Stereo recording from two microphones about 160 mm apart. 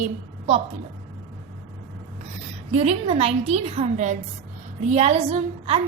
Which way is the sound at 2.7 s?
40° right (ahead or behind).